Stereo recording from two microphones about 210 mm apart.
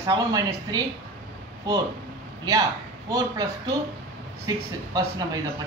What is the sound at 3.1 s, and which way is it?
A man's voice, 20° right (ahead or behind).